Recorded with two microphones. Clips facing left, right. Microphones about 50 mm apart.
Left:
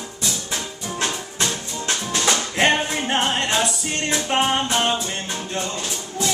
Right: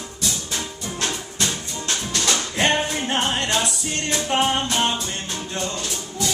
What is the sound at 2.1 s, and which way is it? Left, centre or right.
Music, left.